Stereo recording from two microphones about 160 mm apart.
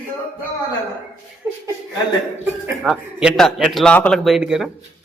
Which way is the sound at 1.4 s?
15° right (ahead or behind).